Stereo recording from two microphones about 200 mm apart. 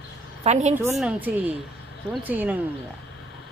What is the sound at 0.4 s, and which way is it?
Speech, 35° right (ahead or behind).